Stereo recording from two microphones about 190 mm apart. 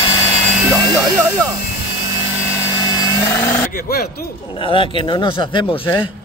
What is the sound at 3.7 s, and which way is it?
Speech, 55° left (ahead or behind).